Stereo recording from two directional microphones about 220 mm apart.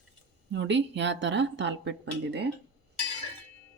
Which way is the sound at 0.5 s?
55° right (ahead or behind).